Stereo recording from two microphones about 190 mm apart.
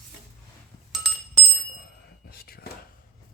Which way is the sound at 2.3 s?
55° left (ahead or behind).